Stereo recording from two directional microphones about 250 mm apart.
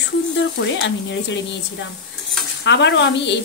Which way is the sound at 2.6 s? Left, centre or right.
Left.